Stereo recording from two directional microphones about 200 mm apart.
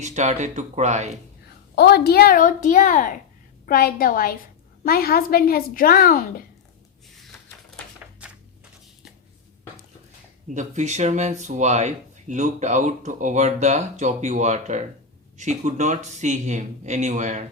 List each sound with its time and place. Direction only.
0.0 s speech: 35° right (ahead or behind)
1.7 s a woman's voice: 55° left (ahead or behind)
10.5 s speech: 35° right (ahead or behind)